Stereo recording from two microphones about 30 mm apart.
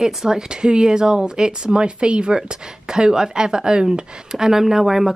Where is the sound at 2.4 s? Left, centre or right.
Right.